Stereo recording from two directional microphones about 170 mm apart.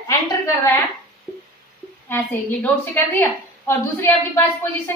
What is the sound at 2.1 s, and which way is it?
A woman's voice, 10° left (ahead or behind).